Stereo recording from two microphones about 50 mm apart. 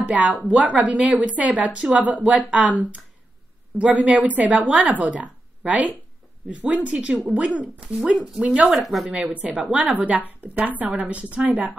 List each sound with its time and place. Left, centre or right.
0.0 s speech: right
3.7 s a woman's voice: right
8.7 s a woman's voice: centre
9.1 s a woman's voice: right